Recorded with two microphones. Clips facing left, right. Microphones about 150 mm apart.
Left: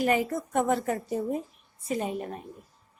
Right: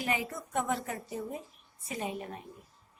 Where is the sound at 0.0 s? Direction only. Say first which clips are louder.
Left 8 dB; 45° left (ahead or behind).